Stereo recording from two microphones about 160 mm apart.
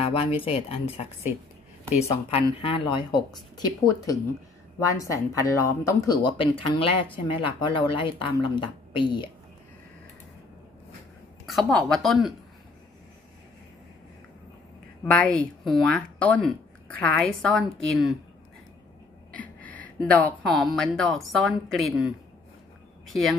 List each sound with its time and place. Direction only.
0.0 s a sound: 35° left (ahead or behind)
0.4 s speech: 35° left (ahead or behind)
2.6 s speech: 30° left (ahead or behind)
6.3 s speech: 35° left (ahead or behind)
11.4 s a woman's voice: centre (ahead or behind)
15.0 s a woman's voice: 10° left (ahead or behind)
19.3 s a woman's voice: 10° left (ahead or behind)